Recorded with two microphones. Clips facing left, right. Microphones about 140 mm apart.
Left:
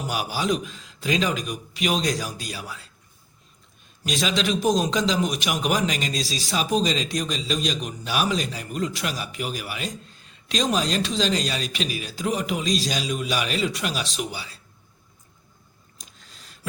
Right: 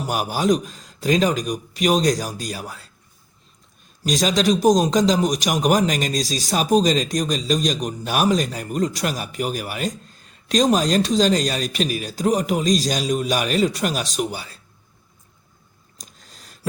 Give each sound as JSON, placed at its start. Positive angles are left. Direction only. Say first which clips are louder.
{"t": 0.1, "sound": "a man's voice", "louder": "right 6 dB", "side_deg": -45}
{"t": 4.0, "sound": "a man's voice", "louder": "right 6 dB", "side_deg": -40}
{"t": 16.0, "sound": "a sound", "louder": "right 3 dB", "side_deg": -40}